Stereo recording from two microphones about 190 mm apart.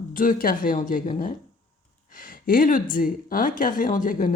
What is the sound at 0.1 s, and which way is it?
Speech, 45° left (ahead or behind).